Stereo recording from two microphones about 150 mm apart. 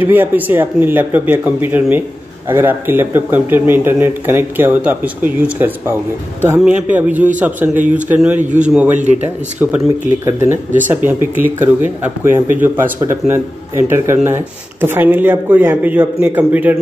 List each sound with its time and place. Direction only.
0.0 s speech: 10° right (ahead or behind)